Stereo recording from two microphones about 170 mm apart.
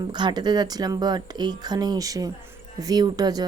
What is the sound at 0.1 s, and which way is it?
Speech, 25° right (ahead or behind).